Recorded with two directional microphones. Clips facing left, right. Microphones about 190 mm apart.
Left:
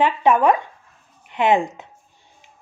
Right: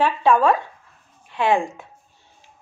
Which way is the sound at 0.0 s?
20° left (ahead or behind).